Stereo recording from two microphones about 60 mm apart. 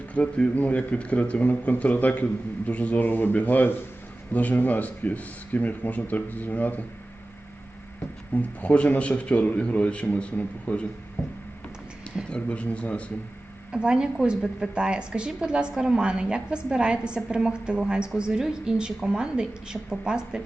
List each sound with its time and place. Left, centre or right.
0.1 s speech: left
8.3 s speech: left
12.3 s speech: left
13.7 s a woman's voice: centre